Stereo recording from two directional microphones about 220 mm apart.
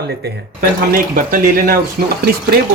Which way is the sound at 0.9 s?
40° right (ahead or behind).